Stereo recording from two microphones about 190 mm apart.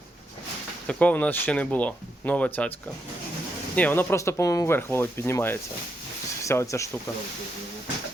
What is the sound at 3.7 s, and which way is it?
Speech, 10° left (ahead or behind).